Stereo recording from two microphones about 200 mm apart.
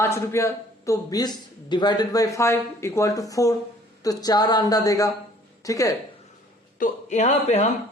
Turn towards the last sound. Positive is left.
turn(degrees=35)  # may be behind; listen again after turning